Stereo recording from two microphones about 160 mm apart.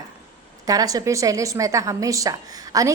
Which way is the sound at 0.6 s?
20° right (ahead or behind).